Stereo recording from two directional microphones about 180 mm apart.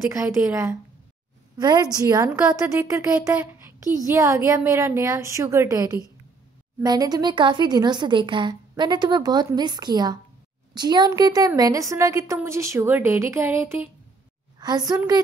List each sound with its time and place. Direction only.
0.4 s a woman's voice: 15° right (ahead or behind)